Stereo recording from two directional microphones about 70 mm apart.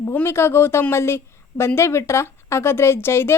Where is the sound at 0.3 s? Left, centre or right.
Left.